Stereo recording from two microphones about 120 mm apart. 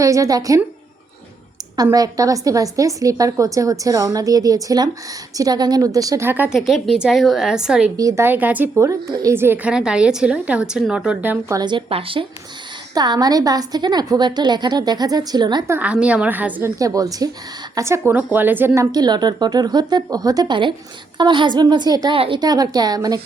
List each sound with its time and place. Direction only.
0.0 s a woman's voice: 25° right (ahead or behind)
1.7 s a woman's voice: 30° right (ahead or behind)
6.5 s a woman's voice: centre (ahead or behind)
7.9 s a woman's voice: 25° right (ahead or behind)
9.7 s a woman's voice: 5° right (ahead or behind)
11.5 s a woman's voice: 40° right (ahead or behind)
11.9 s speech: 50° right (ahead or behind)
12.9 s a woman's voice: 35° right (ahead or behind)
15.6 s a woman's voice: 15° right (ahead or behind)
16.7 s a woman's voice: 30° right (ahead or behind)
22.1 s a woman's voice: 45° right (ahead or behind)